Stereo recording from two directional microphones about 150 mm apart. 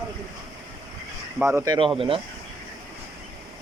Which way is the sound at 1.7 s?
35° right (ahead or behind).